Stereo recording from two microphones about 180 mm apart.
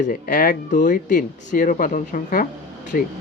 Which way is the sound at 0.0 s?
45° left (ahead or behind).